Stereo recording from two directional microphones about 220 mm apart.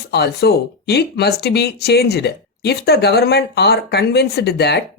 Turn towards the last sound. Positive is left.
turn(degrees=50)  # may be behind; listen again after turning